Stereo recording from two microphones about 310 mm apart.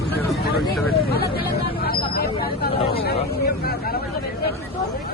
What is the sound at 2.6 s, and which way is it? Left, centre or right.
Hubbub, left.